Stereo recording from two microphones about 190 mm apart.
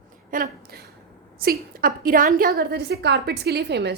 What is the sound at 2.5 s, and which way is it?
A woman's voice, 60° right (ahead or behind).